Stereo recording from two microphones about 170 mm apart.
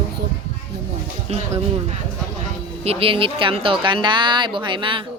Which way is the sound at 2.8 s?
35° right (ahead or behind).